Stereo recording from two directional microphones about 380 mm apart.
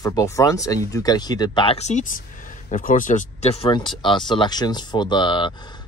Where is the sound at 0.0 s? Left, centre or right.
Centre.